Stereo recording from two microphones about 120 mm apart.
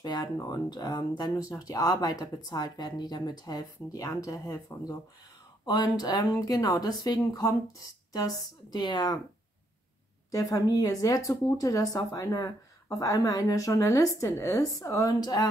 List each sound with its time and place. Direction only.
0.0 s speech: 35° left (ahead or behind)
10.3 s speech: 30° left (ahead or behind)